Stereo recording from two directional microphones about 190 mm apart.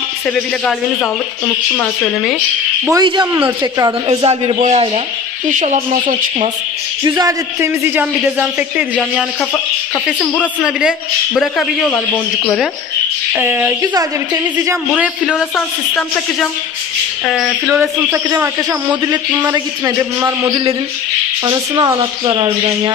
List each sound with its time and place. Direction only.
2.9 s speech: 20° right (ahead or behind)
3.3 s a man's voice: 10° right (ahead or behind)
4.1 s speech: 30° right (ahead or behind)
7.1 s a man's voice: 20° right (ahead or behind)
10.6 s a woman's voice: 5° right (ahead or behind)
13.3 s a man's voice: 10° right (ahead or behind)
15.0 s a woman's voice: centre (ahead or behind)
17.3 s a woman's voice: centre (ahead or behind)
18.1 s a man's voice: 10° right (ahead or behind)